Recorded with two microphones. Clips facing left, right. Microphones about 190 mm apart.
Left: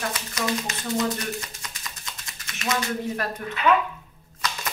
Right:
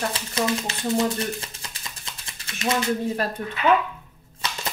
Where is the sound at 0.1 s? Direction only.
30° right (ahead or behind).